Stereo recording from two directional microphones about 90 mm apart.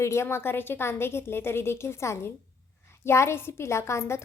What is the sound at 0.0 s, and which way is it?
A woman's voice, 30° left (ahead or behind).